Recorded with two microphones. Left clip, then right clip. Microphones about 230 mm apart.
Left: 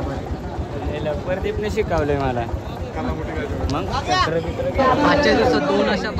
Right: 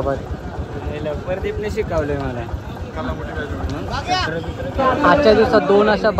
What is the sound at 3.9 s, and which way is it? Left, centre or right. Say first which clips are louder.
Speech: even; left.